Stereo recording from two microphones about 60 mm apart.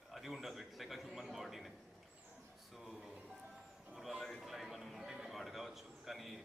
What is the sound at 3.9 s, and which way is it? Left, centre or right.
Music, centre.